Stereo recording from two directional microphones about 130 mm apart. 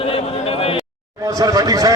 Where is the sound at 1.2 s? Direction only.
25° right (ahead or behind).